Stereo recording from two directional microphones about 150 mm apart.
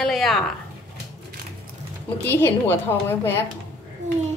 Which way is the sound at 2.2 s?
15° left (ahead or behind).